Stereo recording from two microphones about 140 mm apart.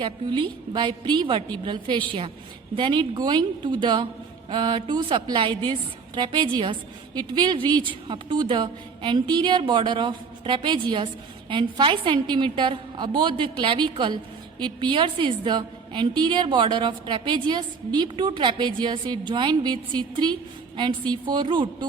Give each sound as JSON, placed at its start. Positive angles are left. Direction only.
{"t": 0.0, "sound": "a woman's voice", "side_deg": -35}